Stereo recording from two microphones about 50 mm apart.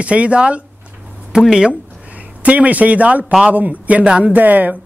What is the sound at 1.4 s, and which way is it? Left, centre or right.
Speech, centre.